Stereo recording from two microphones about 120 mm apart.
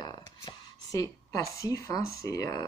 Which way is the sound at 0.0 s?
40° left (ahead or behind).